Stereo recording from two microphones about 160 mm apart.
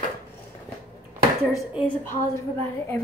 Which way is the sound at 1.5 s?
5° right (ahead or behind).